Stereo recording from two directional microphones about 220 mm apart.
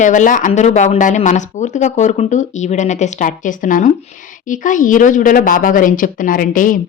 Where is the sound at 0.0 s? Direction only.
35° left (ahead or behind).